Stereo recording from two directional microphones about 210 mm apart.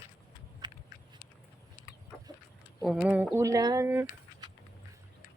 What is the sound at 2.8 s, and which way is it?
Speech, centre (ahead or behind).